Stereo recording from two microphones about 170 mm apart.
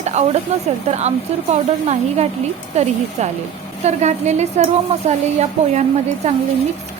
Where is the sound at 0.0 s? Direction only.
40° right (ahead or behind).